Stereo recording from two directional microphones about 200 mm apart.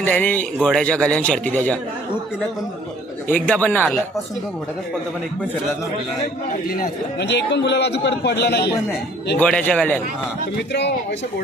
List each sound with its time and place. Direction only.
0.0 s a man's voice: 10° left (ahead or behind)
3.2 s a man's voice: 5° left (ahead or behind)
6.7 s a man's voice: 50° left (ahead or behind)
9.4 s a man's voice: 5° left (ahead or behind)
10.7 s a man's voice: 60° left (ahead or behind)